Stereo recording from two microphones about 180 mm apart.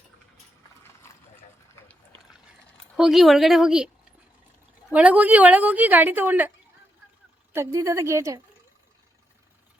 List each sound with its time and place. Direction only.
1.0 s a sound: 15° left (ahead or behind)
2.9 s a woman's voice: centre (ahead or behind)
4.9 s a woman's voice: 10° right (ahead or behind)
7.5 s a woman's voice: 15° right (ahead or behind)